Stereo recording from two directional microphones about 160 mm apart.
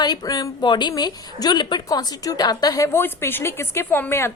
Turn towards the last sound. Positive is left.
turn(degrees=15)  # may be behind; listen again after turning